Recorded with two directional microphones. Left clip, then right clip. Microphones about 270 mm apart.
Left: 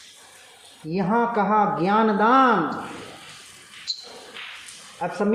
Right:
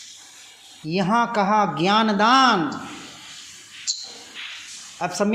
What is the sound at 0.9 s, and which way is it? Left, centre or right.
A woman's voice, right.